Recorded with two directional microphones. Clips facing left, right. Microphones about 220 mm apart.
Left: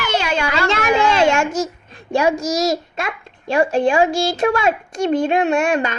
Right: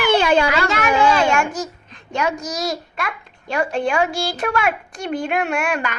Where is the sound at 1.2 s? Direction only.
25° left (ahead or behind).